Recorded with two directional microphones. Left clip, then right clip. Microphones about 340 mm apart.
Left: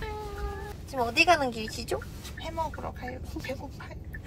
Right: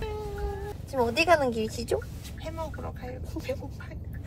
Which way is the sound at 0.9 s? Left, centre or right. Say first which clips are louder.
Even; centre.